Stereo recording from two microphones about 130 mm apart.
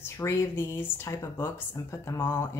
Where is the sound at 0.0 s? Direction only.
20° left (ahead or behind).